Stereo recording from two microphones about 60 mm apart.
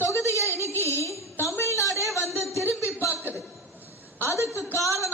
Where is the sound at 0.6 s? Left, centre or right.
Left.